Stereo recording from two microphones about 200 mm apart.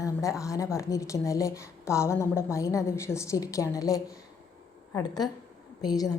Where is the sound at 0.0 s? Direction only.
15° left (ahead or behind).